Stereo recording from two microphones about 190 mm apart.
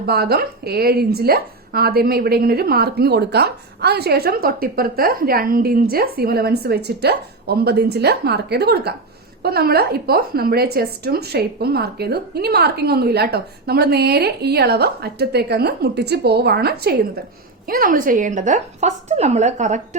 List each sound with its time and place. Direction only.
0.0 s a woman's voice: 55° right (ahead or behind); by 20.0 s 40° right (ahead or behind)